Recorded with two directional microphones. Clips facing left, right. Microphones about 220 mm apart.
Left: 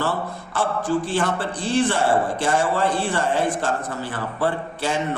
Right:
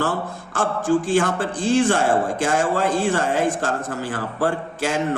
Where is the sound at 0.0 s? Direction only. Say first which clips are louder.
Right 1 dB; 45° right (ahead or behind).